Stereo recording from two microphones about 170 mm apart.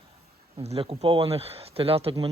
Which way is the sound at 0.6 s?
35° right (ahead or behind).